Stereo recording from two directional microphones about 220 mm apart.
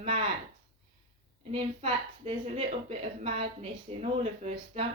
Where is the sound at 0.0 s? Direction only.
25° right (ahead or behind).